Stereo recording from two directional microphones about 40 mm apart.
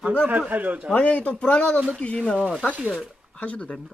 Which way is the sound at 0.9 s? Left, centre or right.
Left.